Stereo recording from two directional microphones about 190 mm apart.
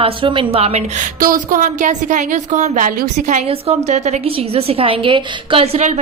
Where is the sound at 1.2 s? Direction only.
45° right (ahead or behind).